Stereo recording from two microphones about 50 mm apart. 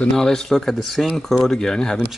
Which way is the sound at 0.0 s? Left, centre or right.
Centre.